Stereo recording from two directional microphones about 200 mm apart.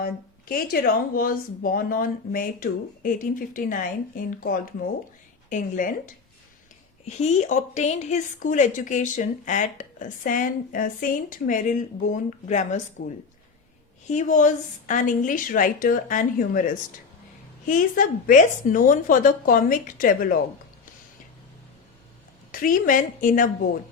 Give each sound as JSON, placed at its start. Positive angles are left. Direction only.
{"t": 0.0, "sound": "a woman's voice", "side_deg": 50}
{"t": 7.0, "sound": "a woman's voice", "side_deg": 35}
{"t": 14.1, "sound": "a woman's voice", "side_deg": 40}
{"t": 22.5, "sound": "a woman's voice", "side_deg": 45}